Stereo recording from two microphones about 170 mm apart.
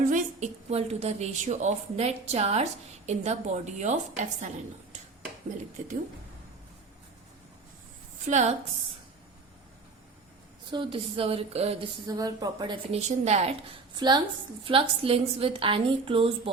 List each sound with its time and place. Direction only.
0.1 s a woman's voice: 40° right (ahead or behind)
8.3 s a woman's voice: 45° right (ahead or behind)
10.7 s a woman's voice: 30° right (ahead or behind)
12.0 s a woman's voice: 20° right (ahead or behind)
13.0 s a woman's voice: 40° right (ahead or behind)
13.9 s a woman's voice: 25° right (ahead or behind)